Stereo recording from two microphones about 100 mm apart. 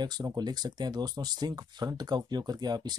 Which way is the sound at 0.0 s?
45° right (ahead or behind).